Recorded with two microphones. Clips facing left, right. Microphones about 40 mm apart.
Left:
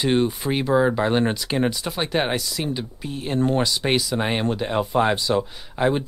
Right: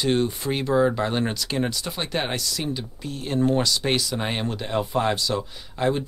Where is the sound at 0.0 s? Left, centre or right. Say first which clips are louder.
Left 2 dB; centre.